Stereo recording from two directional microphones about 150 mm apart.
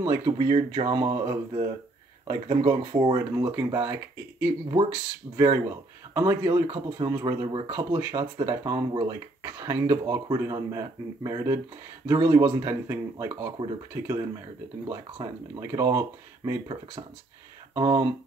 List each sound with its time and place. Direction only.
0.0 s speech: 25° right (ahead or behind)
3.3 s speech: 15° right (ahead or behind)
17.7 s speech: 25° right (ahead or behind)